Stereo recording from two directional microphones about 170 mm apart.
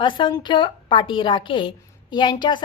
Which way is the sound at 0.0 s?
30° left (ahead or behind).